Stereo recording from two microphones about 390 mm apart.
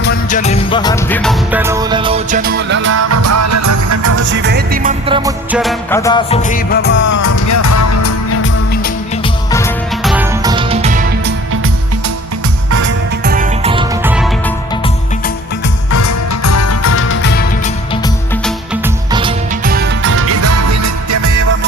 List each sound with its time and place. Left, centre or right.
0.0 s music: centre; by 4.2 s right
4.2 s music: right; by 7.1 s left
7.1 s music: left
9.5 s music: centre
12.8 s music: right; by 14.5 s centre
15.9 s music: left
19.1 s music: centre; by 21.4 s right